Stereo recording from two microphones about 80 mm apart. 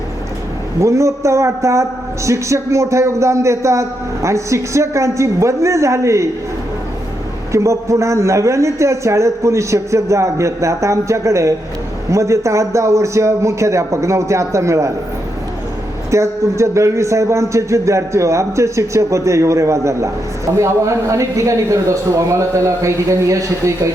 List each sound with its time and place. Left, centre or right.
0.8 s a man's voice: right
7.5 s a man's voice: right
16.0 s a man's voice: right